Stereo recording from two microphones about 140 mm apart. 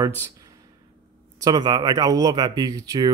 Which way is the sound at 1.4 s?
30° right (ahead or behind).